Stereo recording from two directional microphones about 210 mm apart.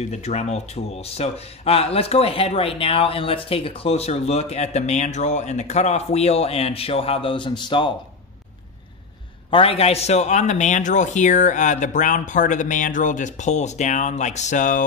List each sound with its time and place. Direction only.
0.1 s a man's voice: 30° left (ahead or behind)
9.5 s a man's voice: 25° left (ahead or behind)